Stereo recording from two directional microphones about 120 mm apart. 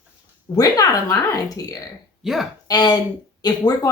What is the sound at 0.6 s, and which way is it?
Speech, 30° left (ahead or behind).